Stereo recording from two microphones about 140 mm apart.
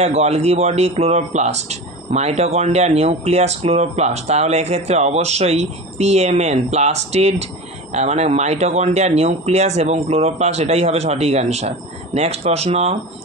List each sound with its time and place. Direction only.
0.0 s speech: 50° right (ahead or behind)